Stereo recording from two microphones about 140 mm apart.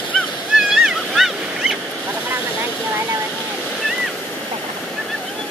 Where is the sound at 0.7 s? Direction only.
5° right (ahead or behind).